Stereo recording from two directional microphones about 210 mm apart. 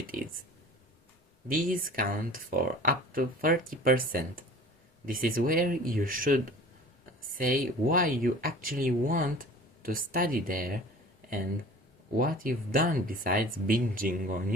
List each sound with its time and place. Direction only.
0.1 s clicking: 40° right (ahead or behind)
1.5 s speech: 40° right (ahead or behind)
12.1 s speech: 40° right (ahead or behind)